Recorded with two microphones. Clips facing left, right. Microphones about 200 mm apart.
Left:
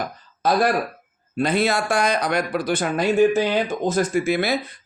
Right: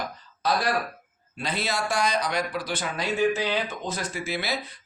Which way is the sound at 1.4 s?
55° left (ahead or behind).